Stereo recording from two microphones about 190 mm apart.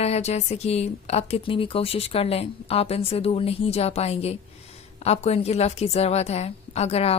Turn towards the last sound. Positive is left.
turn(degrees=35)  # may be behind; listen again after turning